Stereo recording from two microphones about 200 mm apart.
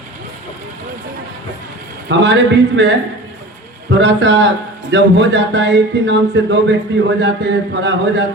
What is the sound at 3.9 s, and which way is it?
Speech, 65° right (ahead or behind).